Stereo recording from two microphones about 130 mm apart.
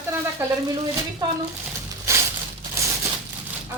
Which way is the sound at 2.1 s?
20° right (ahead or behind).